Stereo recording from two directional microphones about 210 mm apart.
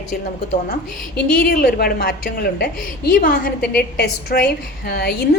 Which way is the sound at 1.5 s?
50° left (ahead or behind).